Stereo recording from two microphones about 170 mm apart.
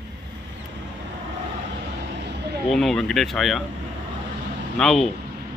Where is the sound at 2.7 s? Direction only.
Centre (ahead or behind).